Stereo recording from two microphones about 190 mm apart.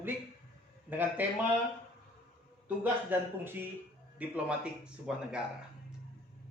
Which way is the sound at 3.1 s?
10° right (ahead or behind).